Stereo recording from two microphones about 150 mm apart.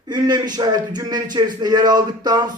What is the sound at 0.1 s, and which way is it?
Speech, 30° right (ahead or behind).